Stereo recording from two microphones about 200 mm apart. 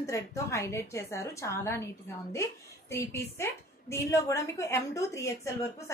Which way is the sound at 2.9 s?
10° left (ahead or behind).